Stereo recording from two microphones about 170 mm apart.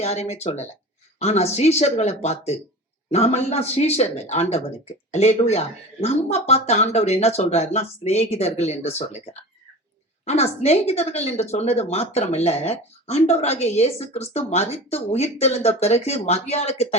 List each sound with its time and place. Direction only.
0.0 s speech: 40° left (ahead or behind)